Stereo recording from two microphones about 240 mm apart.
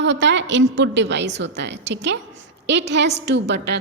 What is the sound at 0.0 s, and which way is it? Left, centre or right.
A woman's voice, right.